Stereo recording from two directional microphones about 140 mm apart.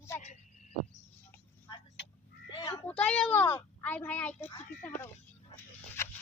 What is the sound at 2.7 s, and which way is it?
A woman's voice, 10° left (ahead or behind).